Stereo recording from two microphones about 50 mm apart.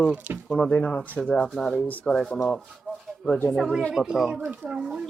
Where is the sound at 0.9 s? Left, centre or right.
Left.